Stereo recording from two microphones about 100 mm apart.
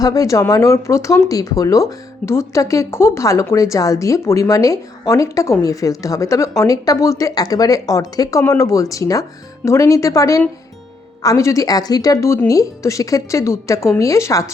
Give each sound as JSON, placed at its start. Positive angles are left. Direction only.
{"t": 0.0, "sound": "speech", "side_deg": 35}